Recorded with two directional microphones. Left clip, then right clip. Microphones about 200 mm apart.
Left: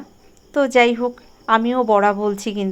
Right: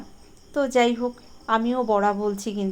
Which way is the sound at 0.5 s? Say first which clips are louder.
Left 6 dB; 25° left (ahead or behind).